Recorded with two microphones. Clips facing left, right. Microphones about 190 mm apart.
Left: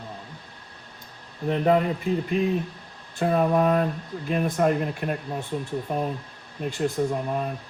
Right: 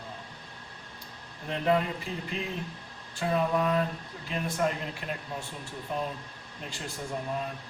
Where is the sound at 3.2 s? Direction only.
50° left (ahead or behind).